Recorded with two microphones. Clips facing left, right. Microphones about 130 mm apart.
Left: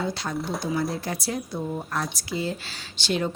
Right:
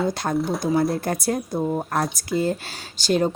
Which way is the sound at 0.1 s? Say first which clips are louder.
Right 6 dB; 50° right (ahead or behind).